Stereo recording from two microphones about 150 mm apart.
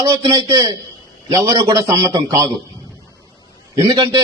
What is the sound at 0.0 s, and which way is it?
A man's voice, 25° right (ahead or behind).